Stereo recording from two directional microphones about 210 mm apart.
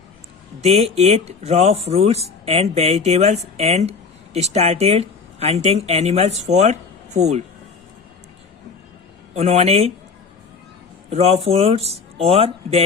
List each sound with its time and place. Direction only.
0.6 s speech: 30° right (ahead or behind)
9.3 s speech: 30° right (ahead or behind)
11.1 s speech: 30° right (ahead or behind)